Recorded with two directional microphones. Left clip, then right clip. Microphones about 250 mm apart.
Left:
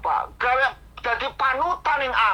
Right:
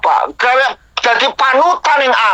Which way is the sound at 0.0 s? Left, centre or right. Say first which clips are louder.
Right 11 dB; right.